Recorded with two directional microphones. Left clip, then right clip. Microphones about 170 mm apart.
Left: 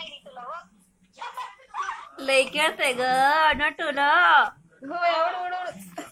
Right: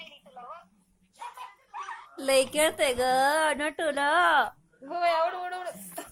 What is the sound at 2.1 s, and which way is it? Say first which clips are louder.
A woman's voice: left 2 dB; 55° right (ahead or behind).